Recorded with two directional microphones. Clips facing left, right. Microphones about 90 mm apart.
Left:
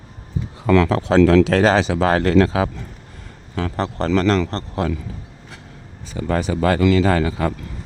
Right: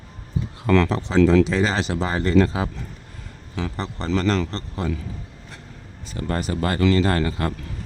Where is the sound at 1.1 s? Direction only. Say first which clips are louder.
Left 4 dB; 90° left.